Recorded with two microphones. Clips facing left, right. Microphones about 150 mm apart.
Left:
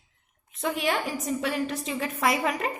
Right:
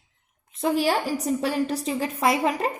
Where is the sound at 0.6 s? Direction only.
30° right (ahead or behind).